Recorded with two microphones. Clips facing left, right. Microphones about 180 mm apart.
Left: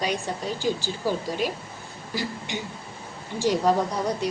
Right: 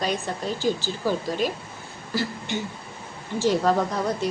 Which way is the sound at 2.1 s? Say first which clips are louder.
Right 3 dB; 15° left (ahead or behind).